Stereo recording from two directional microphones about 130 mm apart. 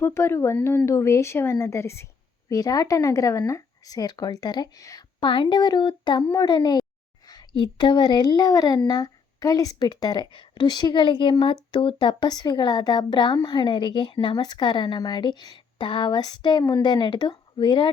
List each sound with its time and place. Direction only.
0.0 s a woman's voice: 20° left (ahead or behind); by 17.9 s 40° left (ahead or behind)